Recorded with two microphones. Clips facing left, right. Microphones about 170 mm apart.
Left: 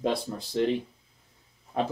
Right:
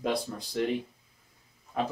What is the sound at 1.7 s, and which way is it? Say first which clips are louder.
Speech: left 2 dB; 30° left (ahead or behind).